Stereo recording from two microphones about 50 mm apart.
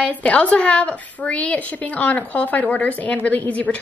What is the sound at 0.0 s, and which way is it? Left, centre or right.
A woman's voice, left.